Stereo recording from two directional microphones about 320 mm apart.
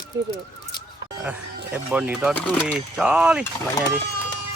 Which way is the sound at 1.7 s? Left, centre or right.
Centre.